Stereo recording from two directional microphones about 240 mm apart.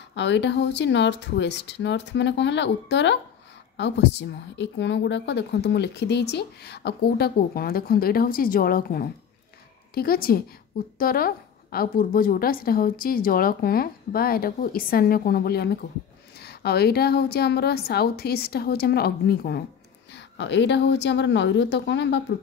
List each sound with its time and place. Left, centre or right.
0.1 s a woman's voice: left